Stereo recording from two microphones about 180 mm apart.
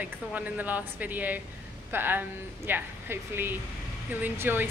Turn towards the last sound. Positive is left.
turn(degrees=-10)  # may be behind; listen again after turning